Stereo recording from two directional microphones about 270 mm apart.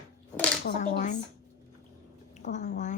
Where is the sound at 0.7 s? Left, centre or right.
Left.